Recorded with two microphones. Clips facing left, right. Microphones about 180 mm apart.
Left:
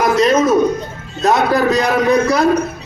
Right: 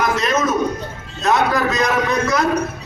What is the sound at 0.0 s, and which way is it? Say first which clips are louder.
A man's voice: left 6 dB; 35° left (ahead or behind).